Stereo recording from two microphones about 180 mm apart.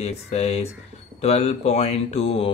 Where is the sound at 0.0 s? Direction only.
35° left (ahead or behind).